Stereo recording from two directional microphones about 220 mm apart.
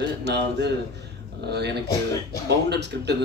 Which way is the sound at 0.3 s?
50° right (ahead or behind).